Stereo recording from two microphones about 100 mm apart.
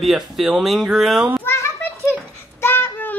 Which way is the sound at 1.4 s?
25° left (ahead or behind).